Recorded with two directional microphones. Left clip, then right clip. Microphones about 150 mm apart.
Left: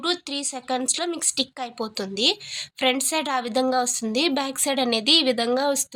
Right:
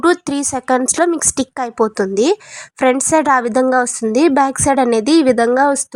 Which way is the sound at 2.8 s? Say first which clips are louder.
Right 10 dB; 45° right (ahead or behind).